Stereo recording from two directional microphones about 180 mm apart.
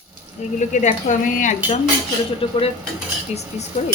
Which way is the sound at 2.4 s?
30° left (ahead or behind).